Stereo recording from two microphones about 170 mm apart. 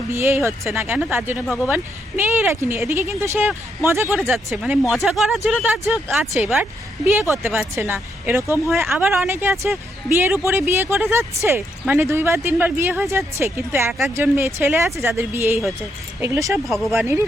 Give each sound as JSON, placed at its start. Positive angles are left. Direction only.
{"t": 0.1, "sound": "speech", "side_deg": -15}
{"t": 16.6, "sound": "speech", "side_deg": 0}
{"t": 17.0, "sound": "speech", "side_deg": -15}